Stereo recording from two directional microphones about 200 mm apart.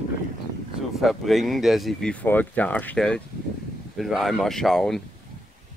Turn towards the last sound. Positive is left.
turn(degrees=0)  # may be behind; listen again after turning